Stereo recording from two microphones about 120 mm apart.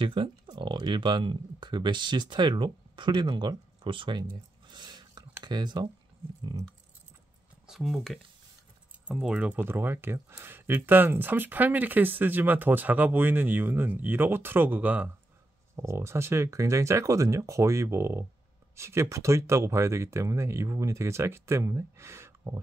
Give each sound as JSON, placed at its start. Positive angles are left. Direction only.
{"t": 0.0, "sound": "speech", "side_deg": -45}
{"t": 7.6, "sound": "speech", "side_deg": 0}